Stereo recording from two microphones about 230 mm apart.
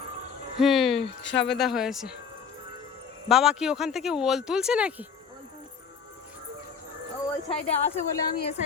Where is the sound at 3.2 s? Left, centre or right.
Centre.